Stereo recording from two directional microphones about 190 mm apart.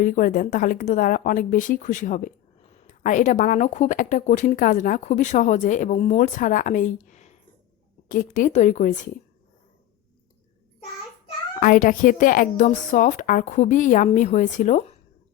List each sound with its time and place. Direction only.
0.0 s speech: 45° left (ahead or behind)
11.6 s speech: 45° left (ahead or behind)